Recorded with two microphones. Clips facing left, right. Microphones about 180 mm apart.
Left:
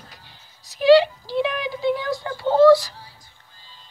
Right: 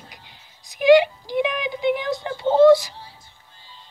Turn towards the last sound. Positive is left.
turn(degrees=-20)  # may be behind; listen again after turning